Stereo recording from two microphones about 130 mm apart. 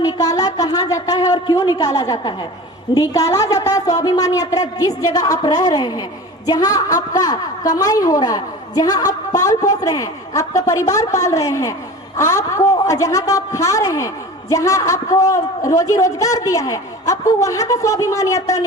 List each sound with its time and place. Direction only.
0.0 s a woman's voice: 30° left (ahead or behind)